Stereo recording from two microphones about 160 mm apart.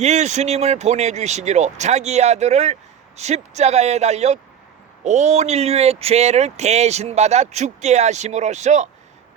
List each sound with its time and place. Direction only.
0.0 s speech: 45° right (ahead or behind)